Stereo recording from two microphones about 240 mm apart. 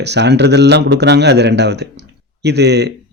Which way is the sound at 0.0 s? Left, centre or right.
Right.